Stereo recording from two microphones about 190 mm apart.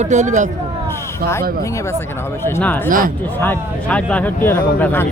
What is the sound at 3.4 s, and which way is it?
Speech, 10° left (ahead or behind).